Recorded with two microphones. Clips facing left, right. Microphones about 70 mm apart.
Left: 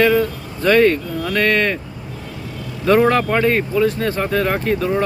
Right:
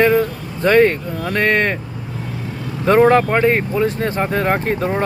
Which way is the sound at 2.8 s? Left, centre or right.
Right.